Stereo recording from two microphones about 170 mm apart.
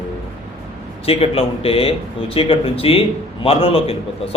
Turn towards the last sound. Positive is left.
turn(degrees=35)  # may be behind; listen again after turning